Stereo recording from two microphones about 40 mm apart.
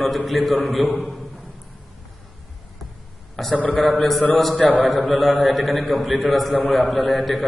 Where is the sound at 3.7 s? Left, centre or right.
Left.